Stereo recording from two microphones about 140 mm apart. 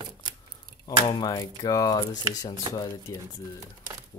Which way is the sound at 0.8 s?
30° left (ahead or behind).